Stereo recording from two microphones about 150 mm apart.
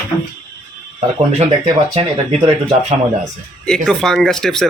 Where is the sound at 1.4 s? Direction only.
40° right (ahead or behind).